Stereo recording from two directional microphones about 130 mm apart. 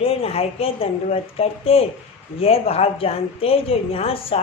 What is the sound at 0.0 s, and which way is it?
A woman's voice, 50° left (ahead or behind).